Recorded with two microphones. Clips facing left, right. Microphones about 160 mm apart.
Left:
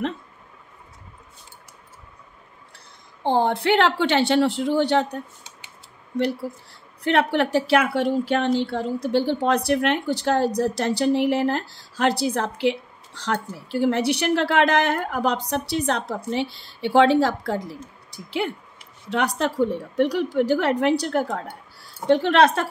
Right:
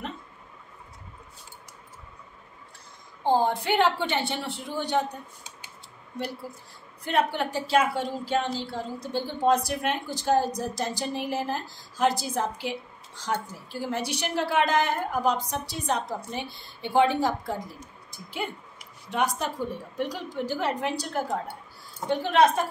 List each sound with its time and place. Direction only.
3.3 s a woman's voice: 70° left (ahead or behind)
7.0 s a woman's voice: 75° left (ahead or behind)